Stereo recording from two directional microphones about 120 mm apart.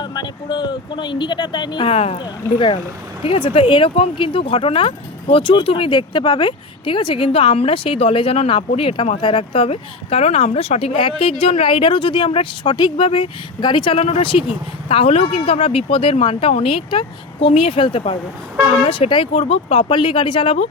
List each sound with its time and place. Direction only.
0.0 s speech: 35° left (ahead or behind)